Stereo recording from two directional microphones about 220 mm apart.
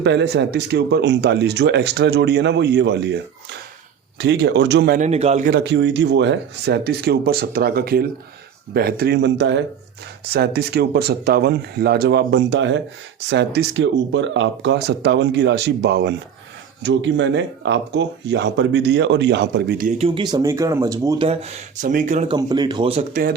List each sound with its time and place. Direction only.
0.0 s speech: 50° right (ahead or behind)
4.2 s speech: 50° right (ahead or behind)
4.9 s speech: 30° right (ahead or behind)
5.5 s speech: 50° right (ahead or behind)
19.9 s speech: 25° right (ahead or behind)
21.2 s speech: 30° right (ahead or behind)
22.4 s speech: 20° right (ahead or behind)